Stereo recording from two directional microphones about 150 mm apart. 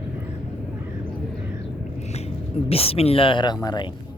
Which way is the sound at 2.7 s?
40° left (ahead or behind).